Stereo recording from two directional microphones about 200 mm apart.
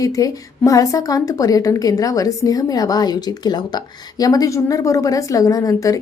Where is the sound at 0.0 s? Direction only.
15° left (ahead or behind).